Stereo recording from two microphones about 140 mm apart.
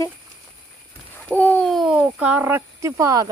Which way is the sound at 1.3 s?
10° left (ahead or behind).